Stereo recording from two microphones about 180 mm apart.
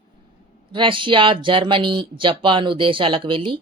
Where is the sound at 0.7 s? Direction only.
25° right (ahead or behind).